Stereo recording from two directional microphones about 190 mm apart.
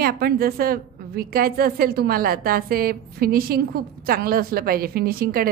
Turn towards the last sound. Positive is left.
turn(degrees=-50)  # may be behind; listen again after turning